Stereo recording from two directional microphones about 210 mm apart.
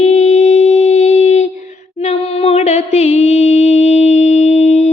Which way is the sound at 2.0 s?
30° left (ahead or behind).